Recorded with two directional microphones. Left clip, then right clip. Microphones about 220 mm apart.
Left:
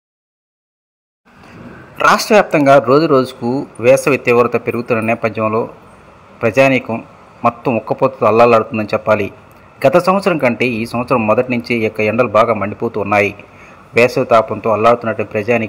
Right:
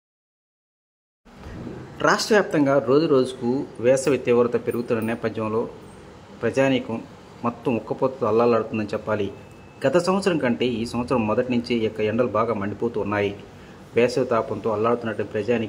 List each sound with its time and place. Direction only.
2.0 s speech: 20° left (ahead or behind)